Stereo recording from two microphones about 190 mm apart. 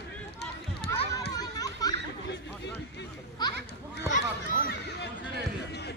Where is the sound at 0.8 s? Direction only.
55° left (ahead or behind).